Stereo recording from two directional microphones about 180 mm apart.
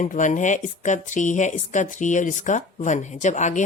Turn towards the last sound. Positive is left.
turn(degrees=40)  # may be behind; listen again after turning